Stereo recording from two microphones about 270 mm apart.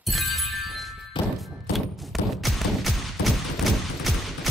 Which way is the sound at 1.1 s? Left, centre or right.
Centre.